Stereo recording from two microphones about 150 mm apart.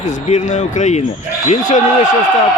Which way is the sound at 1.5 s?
55° left (ahead or behind).